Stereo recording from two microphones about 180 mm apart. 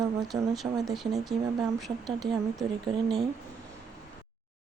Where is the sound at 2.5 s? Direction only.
25° right (ahead or behind).